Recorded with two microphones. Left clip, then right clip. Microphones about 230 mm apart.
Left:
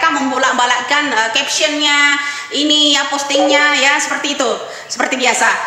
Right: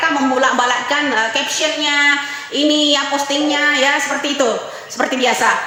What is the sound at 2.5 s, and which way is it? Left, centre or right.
A woman's voice, centre.